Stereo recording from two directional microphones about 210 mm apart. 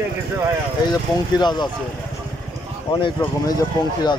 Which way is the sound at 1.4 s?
20° left (ahead or behind).